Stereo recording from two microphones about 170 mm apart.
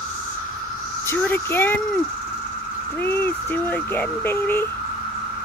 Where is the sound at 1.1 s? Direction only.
15° left (ahead or behind).